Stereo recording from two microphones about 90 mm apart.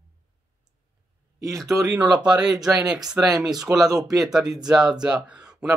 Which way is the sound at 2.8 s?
45° right (ahead or behind).